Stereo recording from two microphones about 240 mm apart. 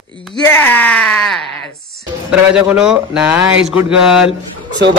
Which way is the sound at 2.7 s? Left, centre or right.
Centre.